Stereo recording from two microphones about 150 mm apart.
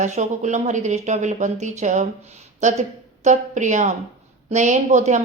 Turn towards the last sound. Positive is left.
turn(degrees=-50)  # may be behind; listen again after turning